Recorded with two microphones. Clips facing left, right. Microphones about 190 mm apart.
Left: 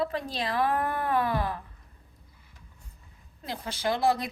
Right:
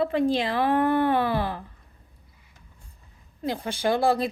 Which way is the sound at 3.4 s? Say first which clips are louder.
Right 5 dB; 30° right (ahead or behind).